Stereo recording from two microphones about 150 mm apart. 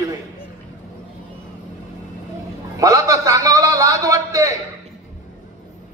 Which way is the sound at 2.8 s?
25° right (ahead or behind).